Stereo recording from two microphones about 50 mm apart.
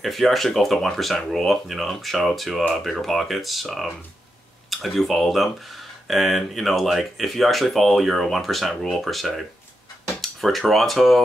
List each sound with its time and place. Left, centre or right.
0.0 s speech: centre